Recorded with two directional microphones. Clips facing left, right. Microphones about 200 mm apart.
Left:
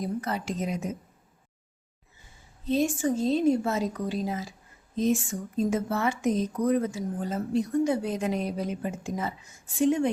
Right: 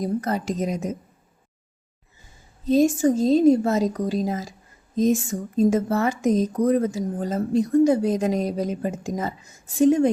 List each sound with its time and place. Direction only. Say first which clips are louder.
0.0 s speech: right 6 dB; 40° right (ahead or behind)
2.6 s speech: right 7 dB; 40° right (ahead or behind)